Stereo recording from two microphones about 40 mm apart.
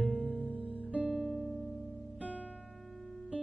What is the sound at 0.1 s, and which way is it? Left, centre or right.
Music, right.